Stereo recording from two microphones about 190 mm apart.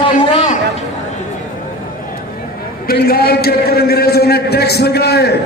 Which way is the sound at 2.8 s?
55° left (ahead or behind).